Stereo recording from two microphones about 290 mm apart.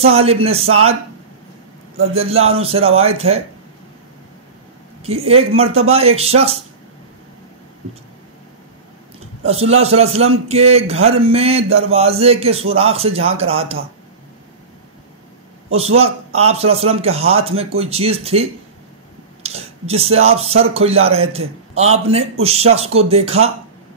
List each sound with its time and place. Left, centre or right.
0.0 s a man's voice: right
2.1 s a man's voice: right
5.0 s a man's voice: right
9.4 s a man's voice: right
16.3 s a man's voice: right
19.4 s a sound: right
20.2 s a man's voice: right